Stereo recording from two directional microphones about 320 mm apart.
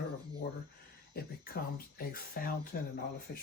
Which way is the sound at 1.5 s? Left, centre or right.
Left.